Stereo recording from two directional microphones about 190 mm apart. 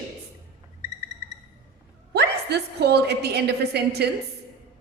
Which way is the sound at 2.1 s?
60° right (ahead or behind).